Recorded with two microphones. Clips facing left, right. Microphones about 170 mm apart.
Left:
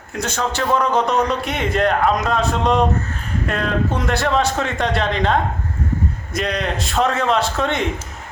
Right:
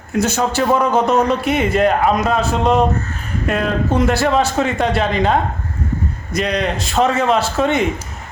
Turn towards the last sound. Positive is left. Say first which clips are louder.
# right 4 dB
turn(degrees=-5)  # may be behind; listen again after turning